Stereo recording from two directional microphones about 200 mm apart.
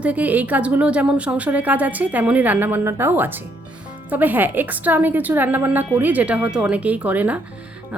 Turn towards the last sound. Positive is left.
turn(degrees=-10)  # may be behind; listen again after turning